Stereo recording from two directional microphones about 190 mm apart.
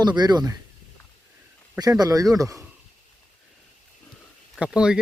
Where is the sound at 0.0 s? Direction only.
20° right (ahead or behind).